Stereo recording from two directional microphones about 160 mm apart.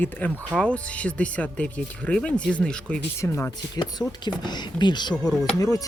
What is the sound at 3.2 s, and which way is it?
Speech, 15° left (ahead or behind).